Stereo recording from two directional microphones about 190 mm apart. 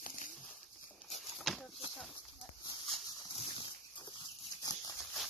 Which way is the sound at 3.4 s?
25° left (ahead or behind).